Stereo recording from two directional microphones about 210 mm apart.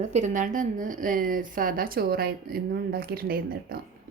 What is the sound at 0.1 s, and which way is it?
A woman's voice, 35° right (ahead or behind).